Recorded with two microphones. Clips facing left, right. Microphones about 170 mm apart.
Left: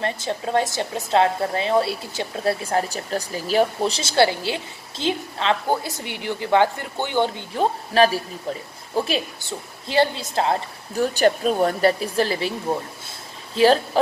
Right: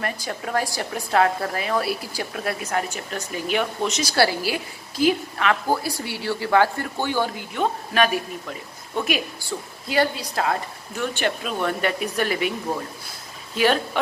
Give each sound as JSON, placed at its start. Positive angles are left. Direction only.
{"t": 0.0, "sound": "a woman's voice", "side_deg": 25}
{"t": 11.1, "sound": "speech", "side_deg": 40}
{"t": 13.6, "sound": "a woman's voice", "side_deg": 30}